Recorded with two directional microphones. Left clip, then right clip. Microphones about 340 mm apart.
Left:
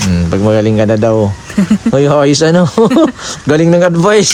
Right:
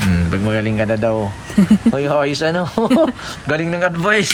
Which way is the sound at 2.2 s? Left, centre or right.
Left.